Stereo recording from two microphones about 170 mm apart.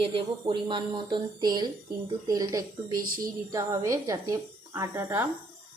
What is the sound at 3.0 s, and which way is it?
Speech, 55° right (ahead or behind).